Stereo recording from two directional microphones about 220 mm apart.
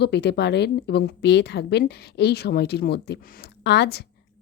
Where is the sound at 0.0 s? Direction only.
50° left (ahead or behind).